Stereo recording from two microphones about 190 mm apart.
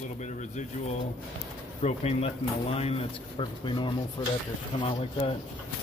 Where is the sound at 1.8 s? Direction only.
35° left (ahead or behind).